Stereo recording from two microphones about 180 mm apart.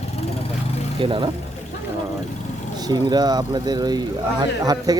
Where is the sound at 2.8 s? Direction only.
20° right (ahead or behind).